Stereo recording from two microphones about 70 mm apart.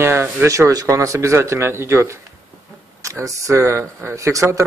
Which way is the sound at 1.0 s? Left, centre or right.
Right.